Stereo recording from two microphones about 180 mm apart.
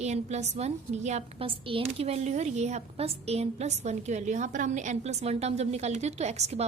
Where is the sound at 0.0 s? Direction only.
40° right (ahead or behind).